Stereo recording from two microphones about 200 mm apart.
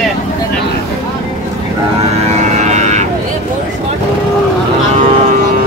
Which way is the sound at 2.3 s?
35° right (ahead or behind).